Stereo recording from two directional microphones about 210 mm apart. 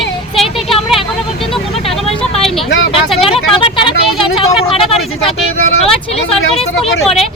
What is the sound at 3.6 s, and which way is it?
Speech, 25° left (ahead or behind).